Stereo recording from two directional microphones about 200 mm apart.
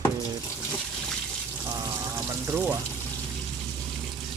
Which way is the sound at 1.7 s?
15° right (ahead or behind).